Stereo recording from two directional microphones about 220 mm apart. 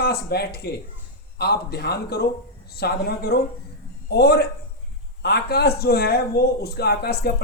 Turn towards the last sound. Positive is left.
turn(degrees=45)  # may be behind; listen again after turning